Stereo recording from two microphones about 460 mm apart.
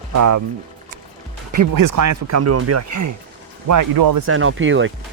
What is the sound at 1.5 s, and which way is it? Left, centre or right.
Speech, right.